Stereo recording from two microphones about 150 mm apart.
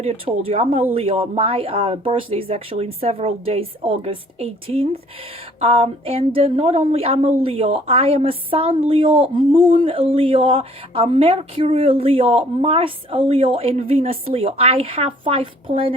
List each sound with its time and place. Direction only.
0.0 s a woman's voice: 40° right (ahead or behind)